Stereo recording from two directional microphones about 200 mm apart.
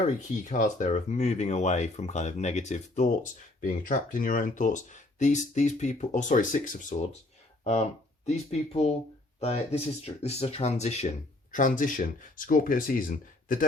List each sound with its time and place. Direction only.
0.0 s speech: 35° left (ahead or behind)